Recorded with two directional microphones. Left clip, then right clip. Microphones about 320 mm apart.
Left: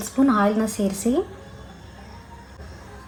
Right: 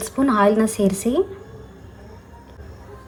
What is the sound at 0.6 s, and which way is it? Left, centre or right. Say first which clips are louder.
Speech: right 5 dB; right.